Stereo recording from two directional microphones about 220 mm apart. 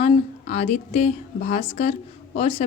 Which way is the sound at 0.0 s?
30° left (ahead or behind).